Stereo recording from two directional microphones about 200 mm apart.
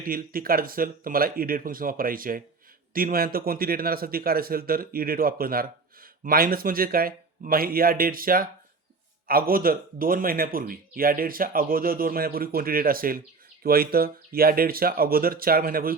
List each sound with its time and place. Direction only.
0.0 s speech: 45° right (ahead or behind)